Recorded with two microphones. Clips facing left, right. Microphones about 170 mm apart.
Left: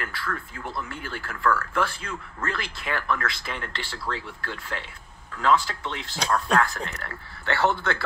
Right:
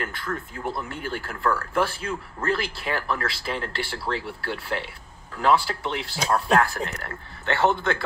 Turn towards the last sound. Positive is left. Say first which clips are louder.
# right 2 dB
turn(degrees=-15)  # may be behind; listen again after turning